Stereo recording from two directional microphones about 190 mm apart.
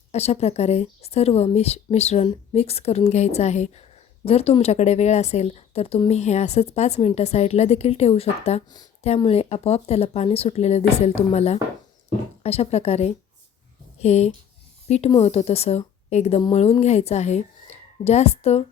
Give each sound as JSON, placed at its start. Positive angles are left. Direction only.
{"t": 0.1, "sound": "a woman's voice", "side_deg": 35}